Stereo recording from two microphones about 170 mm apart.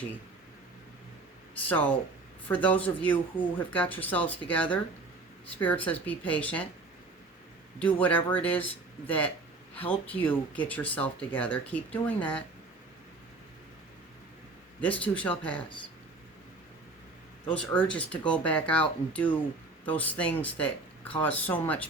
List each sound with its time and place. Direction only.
1.6 s speech: 10° left (ahead or behind)
7.8 s speech: 10° left (ahead or behind)
14.8 s speech: 10° left (ahead or behind)
17.5 s speech: 10° left (ahead or behind)